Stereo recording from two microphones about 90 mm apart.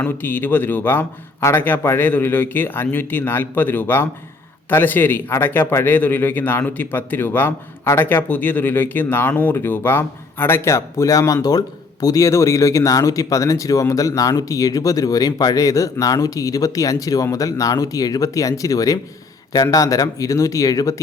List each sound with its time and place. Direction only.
0.0 s a man's voice: 20° left (ahead or behind); by 20.9 s 40° left (ahead or behind)